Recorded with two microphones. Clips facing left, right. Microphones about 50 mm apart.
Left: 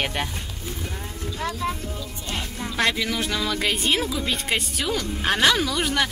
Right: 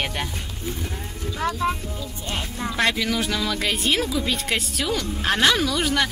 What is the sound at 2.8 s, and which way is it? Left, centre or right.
Speech, centre.